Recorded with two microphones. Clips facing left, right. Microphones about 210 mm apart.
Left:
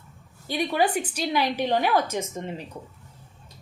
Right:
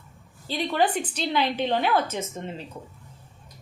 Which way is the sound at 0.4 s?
15° left (ahead or behind).